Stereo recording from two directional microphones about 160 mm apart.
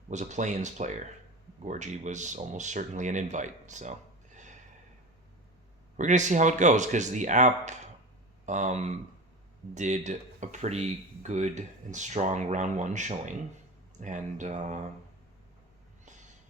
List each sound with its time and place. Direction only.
0.1 s speech: 50° right (ahead or behind)
6.0 s speech: 50° right (ahead or behind)